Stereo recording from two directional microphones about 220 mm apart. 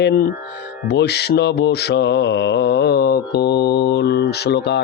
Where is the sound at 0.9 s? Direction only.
50° left (ahead or behind).